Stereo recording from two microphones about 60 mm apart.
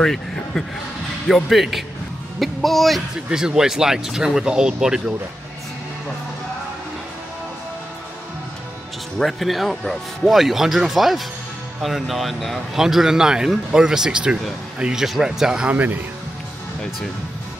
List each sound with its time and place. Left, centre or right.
0.0 s a man's voice: centre
3.3 s speech: centre
9.2 s speech: centre
15.7 s speech: right